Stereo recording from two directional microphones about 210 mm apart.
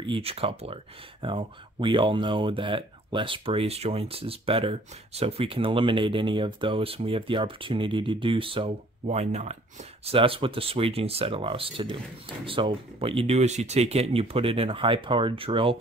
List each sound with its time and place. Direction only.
0.0 s speech: 25° right (ahead or behind)